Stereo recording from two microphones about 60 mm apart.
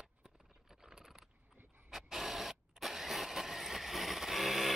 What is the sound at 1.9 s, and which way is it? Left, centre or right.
Vehicle, centre.